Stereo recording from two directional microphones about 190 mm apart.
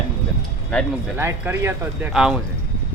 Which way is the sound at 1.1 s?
10° right (ahead or behind).